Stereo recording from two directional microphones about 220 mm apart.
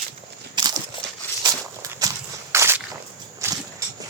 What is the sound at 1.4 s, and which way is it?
Walk, 20° right (ahead or behind).